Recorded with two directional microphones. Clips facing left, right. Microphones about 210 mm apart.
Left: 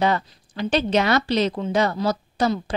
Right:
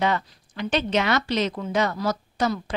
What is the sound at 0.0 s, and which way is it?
A woman's voice, 35° left (ahead or behind).